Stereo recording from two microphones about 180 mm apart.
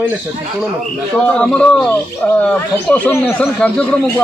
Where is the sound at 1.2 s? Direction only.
5° left (ahead or behind).